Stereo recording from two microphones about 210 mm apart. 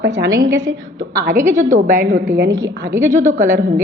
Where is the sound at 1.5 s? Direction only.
35° right (ahead or behind).